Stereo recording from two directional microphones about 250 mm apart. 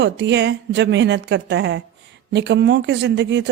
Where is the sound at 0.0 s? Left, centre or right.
Right.